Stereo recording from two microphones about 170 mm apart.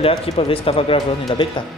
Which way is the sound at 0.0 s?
35° left (ahead or behind).